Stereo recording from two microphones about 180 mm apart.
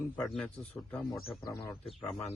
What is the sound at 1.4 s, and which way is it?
Speech, 15° left (ahead or behind).